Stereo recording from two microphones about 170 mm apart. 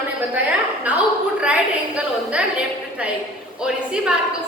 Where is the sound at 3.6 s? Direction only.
5° right (ahead or behind).